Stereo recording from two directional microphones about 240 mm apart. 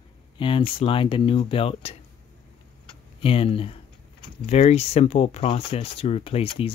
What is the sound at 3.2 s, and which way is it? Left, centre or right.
Speech, left.